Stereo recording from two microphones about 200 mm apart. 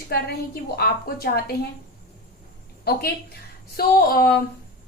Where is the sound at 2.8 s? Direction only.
50° left (ahead or behind).